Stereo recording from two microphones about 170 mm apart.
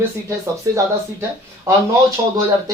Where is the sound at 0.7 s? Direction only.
20° right (ahead or behind).